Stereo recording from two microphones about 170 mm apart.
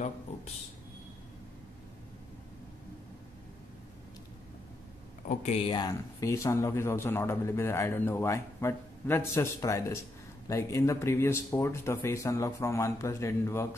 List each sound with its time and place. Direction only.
5.3 s speech: 40° left (ahead or behind)
5.7 s speech: 20° left (ahead or behind)